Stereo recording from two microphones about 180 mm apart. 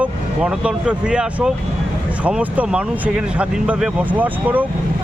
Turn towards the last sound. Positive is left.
turn(degrees=-10)  # may be behind; listen again after turning